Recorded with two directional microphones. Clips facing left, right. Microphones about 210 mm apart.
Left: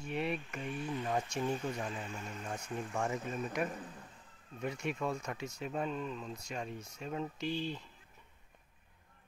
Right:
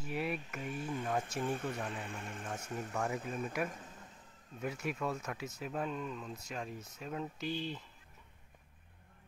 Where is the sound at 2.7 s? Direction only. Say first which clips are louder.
Left 2 dB; 40° right (ahead or behind).